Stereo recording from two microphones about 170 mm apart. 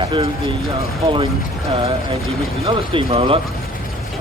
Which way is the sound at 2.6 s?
30° right (ahead or behind).